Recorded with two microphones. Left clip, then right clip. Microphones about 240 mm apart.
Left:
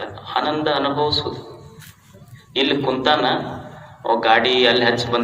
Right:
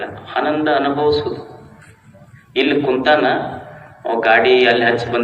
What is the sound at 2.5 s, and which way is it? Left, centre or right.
A man's voice, left.